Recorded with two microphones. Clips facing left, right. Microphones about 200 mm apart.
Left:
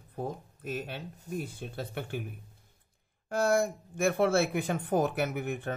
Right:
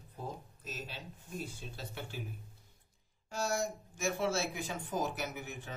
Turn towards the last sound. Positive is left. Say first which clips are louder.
# left 10 dB
turn(degrees=60)  # may be behind; listen again after turning